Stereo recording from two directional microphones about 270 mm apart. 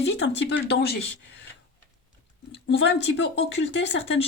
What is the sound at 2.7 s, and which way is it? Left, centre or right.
Speech, left.